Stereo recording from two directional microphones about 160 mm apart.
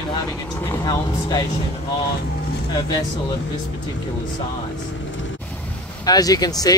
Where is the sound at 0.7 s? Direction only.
25° left (ahead or behind).